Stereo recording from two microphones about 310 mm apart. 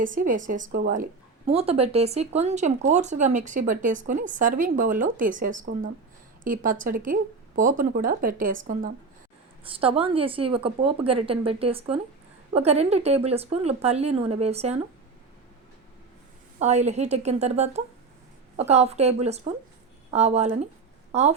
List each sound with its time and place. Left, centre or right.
0.0 s speech: right
9.6 s a woman's voice: centre
16.6 s a woman's voice: right